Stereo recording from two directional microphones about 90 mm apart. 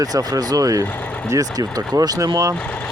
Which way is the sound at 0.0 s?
45° right (ahead or behind).